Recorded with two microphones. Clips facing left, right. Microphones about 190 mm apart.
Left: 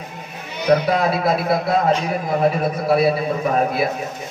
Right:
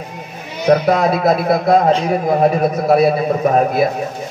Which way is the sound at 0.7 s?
45° right (ahead or behind).